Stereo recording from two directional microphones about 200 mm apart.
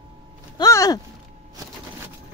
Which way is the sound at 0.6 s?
15° left (ahead or behind).